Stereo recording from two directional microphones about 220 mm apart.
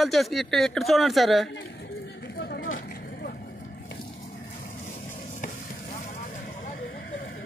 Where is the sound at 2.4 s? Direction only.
45° left (ahead or behind).